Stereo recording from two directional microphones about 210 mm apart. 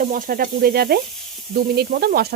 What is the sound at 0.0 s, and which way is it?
Speech, 40° right (ahead or behind).